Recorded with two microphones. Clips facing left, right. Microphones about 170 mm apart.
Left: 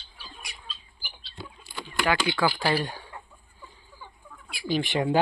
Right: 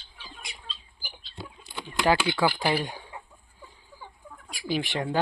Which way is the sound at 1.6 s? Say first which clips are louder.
Right 1 dB; 20° right (ahead or behind).